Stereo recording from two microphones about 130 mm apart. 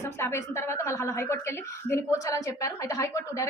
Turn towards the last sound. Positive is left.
turn(degrees=25)  # may be behind; listen again after turning